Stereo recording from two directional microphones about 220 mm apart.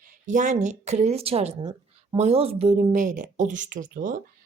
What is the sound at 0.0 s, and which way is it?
A woman's voice, 35° right (ahead or behind).